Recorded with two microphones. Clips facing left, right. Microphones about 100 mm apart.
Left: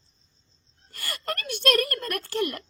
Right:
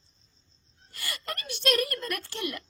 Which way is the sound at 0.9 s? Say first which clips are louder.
Left 5 dB; 45° left (ahead or behind).